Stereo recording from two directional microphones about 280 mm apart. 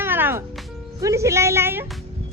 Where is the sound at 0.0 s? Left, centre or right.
Centre.